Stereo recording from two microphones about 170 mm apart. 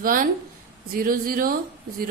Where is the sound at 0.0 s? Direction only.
55° right (ahead or behind).